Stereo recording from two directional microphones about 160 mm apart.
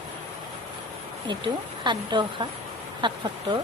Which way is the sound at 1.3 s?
30° right (ahead or behind).